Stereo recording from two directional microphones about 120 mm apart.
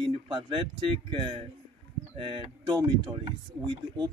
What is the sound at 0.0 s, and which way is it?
Speech, 45° right (ahead or behind).